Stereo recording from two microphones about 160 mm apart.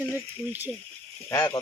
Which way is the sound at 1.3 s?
20° left (ahead or behind).